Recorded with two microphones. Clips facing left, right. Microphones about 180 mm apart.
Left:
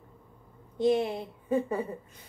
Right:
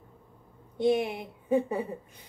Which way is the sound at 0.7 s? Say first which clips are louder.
Even; 10° right (ahead or behind).